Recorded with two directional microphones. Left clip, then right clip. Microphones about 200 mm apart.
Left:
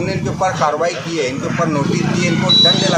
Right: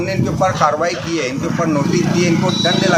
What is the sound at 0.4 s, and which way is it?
Speech, 5° left (ahead or behind).